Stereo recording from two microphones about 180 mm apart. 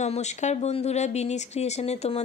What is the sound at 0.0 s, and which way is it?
Speech, 40° left (ahead or behind).